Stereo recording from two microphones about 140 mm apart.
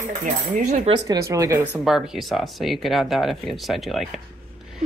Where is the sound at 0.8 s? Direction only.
30° right (ahead or behind).